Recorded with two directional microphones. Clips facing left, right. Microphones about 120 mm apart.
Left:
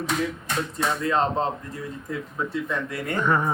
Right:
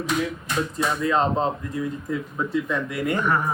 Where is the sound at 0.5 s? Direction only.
Centre (ahead or behind).